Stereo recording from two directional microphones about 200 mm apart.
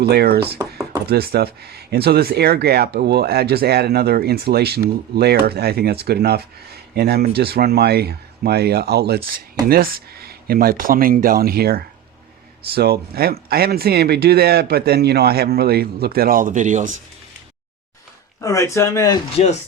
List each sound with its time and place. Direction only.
0.0 s speech: 55° right (ahead or behind); by 17.0 s 40° right (ahead or behind)
18.3 s speech: 15° left (ahead or behind)